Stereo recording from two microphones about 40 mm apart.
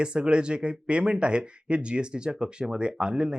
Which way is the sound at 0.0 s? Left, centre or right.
Right.